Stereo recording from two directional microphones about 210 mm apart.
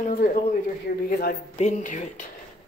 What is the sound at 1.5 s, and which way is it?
Speech, 35° left (ahead or behind).